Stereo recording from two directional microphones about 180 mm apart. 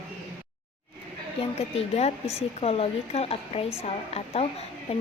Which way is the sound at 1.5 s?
35° left (ahead or behind).